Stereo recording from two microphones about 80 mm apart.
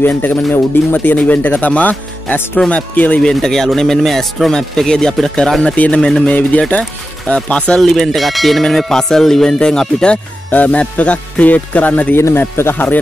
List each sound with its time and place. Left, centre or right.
0.0 s speech: left
3.2 s speech: centre
12.2 s speech: left